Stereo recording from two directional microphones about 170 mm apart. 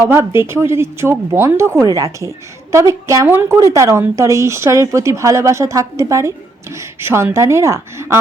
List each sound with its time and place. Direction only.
0.0 s a woman's voice: 15° right (ahead or behind)